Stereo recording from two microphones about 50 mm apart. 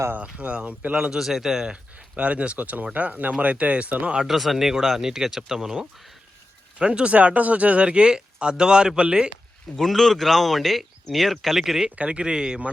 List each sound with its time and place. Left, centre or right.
0.2 s speech: right
0.9 s speech: centre
1.7 s speech: right
4.3 s speech: centre
6.7 s speech: right
9.7 s speech: centre
11.9 s speech: right